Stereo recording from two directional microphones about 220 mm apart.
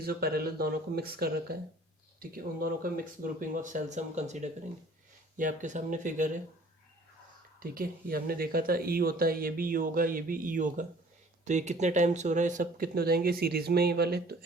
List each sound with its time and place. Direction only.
0.0 s speech: 45° right (ahead or behind)
7.6 s speech: 40° right (ahead or behind)